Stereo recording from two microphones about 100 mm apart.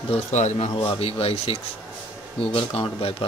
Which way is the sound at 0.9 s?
75° left (ahead or behind).